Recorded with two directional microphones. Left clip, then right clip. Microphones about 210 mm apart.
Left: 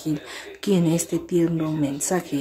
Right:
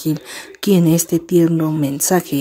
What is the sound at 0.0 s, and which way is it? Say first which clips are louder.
Speech: right 6 dB; 40° right (ahead or behind).